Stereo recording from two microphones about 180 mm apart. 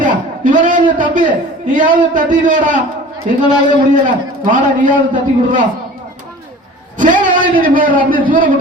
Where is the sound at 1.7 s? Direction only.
45° right (ahead or behind).